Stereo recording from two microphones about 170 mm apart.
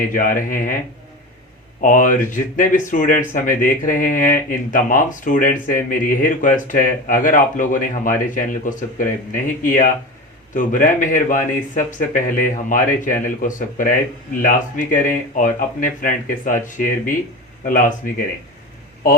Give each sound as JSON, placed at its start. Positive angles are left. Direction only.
{"t": 0.1, "sound": "speech", "side_deg": 55}
{"t": 1.8, "sound": "speech", "side_deg": 50}